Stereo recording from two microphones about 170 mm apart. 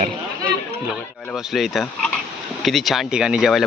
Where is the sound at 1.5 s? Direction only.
Centre (ahead or behind).